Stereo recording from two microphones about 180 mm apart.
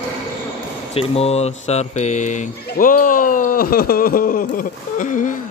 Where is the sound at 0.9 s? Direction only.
35° left (ahead or behind).